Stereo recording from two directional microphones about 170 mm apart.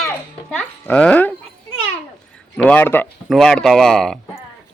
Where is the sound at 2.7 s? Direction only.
10° left (ahead or behind).